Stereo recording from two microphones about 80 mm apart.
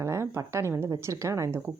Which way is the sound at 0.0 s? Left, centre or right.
Right.